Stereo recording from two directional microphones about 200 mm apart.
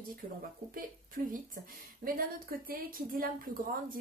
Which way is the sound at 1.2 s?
45° right (ahead or behind).